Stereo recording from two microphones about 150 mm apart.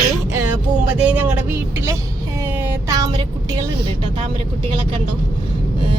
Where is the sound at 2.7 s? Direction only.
25° right (ahead or behind).